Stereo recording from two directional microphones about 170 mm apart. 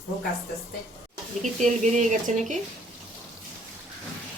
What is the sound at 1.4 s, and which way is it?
Speech, 45° right (ahead or behind).